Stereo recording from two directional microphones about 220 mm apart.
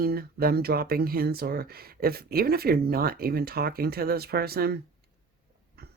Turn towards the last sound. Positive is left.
turn(degrees=-45)  # may be behind; listen again after turning